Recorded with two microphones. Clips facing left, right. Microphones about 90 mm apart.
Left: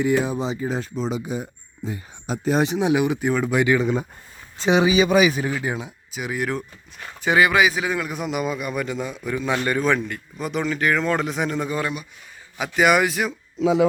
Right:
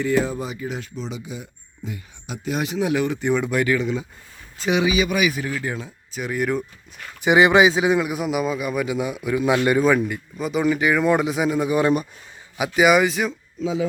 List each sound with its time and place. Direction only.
0.0 s speech: 15° left (ahead or behind)
3.5 s speech: 15° left (ahead or behind)
3.8 s speech: 40° left (ahead or behind)
4.5 s speech: 30° left (ahead or behind)
6.1 s speech: 5° left (ahead or behind)
7.2 s a man's voice: 20° right (ahead or behind); by 13.3 s centre (ahead or behind)
13.6 s speech: 75° left (ahead or behind)